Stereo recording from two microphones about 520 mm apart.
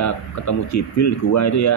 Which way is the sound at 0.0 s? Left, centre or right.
Left.